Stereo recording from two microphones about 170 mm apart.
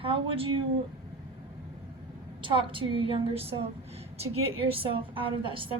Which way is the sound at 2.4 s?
30° right (ahead or behind).